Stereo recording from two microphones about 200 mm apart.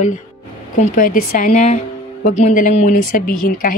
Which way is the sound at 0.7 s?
40° left (ahead or behind).